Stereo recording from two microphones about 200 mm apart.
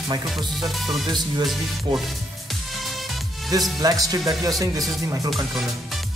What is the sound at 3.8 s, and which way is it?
Speech, 20° right (ahead or behind).